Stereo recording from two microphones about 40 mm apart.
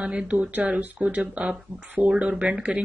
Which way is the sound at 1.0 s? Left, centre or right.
Right.